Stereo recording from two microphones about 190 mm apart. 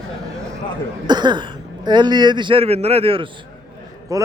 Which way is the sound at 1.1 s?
25° right (ahead or behind).